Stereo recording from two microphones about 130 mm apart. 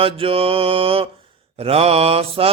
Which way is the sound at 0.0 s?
45° right (ahead or behind).